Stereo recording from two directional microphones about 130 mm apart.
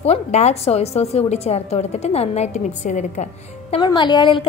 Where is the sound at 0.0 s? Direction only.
55° left (ahead or behind).